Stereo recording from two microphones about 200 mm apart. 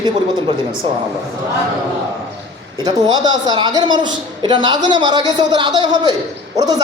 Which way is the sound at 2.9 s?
20° right (ahead or behind).